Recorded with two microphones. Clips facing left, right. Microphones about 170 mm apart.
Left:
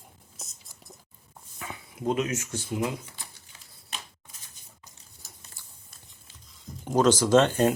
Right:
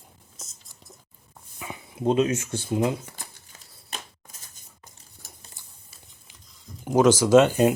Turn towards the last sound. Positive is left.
turn(degrees=-10)  # may be behind; listen again after turning